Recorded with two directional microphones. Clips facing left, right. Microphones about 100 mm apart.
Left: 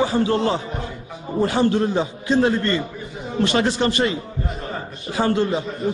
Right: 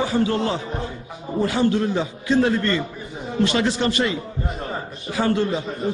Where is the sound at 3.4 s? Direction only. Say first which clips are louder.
Left 1 dB; 45° left (ahead or behind).